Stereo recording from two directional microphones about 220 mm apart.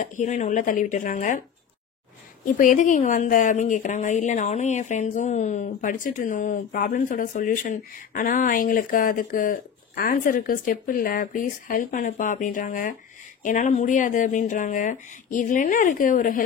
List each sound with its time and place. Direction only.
0.0 s a woman's voice: 35° left (ahead or behind)
2.4 s a woman's voice: 35° left (ahead or behind)